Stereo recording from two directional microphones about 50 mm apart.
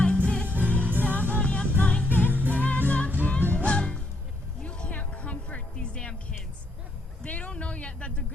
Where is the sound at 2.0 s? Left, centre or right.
Left.